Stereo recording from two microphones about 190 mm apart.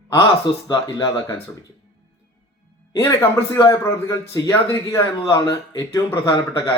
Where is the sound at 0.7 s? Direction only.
20° left (ahead or behind).